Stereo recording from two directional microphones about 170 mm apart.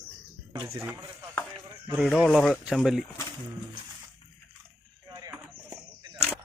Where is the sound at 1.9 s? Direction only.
5° right (ahead or behind).